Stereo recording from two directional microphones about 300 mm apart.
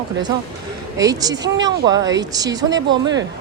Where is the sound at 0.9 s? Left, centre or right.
Centre.